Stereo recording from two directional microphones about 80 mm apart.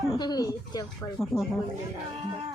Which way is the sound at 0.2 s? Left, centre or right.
Left.